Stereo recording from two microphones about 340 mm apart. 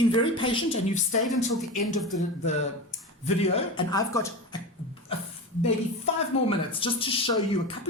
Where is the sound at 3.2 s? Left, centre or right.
Centre.